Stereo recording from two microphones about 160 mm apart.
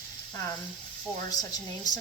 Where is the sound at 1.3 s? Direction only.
25° left (ahead or behind).